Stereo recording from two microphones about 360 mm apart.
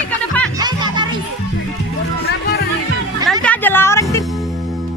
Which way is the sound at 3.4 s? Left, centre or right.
Centre.